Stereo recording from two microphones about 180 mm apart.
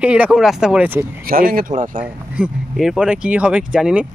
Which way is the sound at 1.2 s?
50° right (ahead or behind).